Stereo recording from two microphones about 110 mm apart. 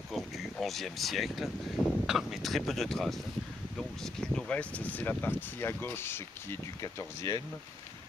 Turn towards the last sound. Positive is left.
turn(degrees=35)  # may be behind; listen again after turning